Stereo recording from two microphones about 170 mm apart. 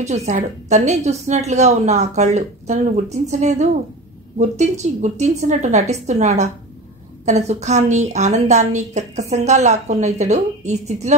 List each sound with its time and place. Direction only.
0.0 s a woman's voice: 40° right (ahead or behind)